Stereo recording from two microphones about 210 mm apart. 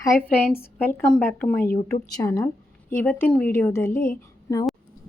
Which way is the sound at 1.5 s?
45° left (ahead or behind).